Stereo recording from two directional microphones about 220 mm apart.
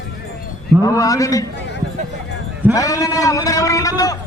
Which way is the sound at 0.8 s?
15° left (ahead or behind).